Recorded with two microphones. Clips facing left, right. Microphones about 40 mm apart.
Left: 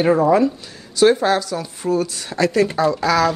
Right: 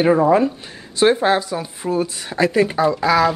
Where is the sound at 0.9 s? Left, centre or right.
Right.